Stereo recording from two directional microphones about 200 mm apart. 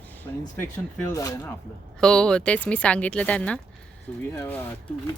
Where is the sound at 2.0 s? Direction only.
5° left (ahead or behind).